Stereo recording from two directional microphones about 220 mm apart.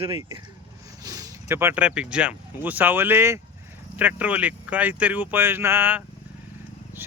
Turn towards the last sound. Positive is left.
turn(degrees=-10)  # may be behind; listen again after turning